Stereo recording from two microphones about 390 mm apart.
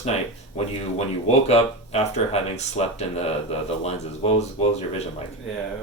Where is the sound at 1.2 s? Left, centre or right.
Centre.